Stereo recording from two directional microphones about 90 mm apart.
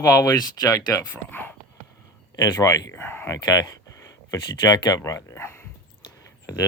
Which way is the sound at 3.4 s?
50° left (ahead or behind).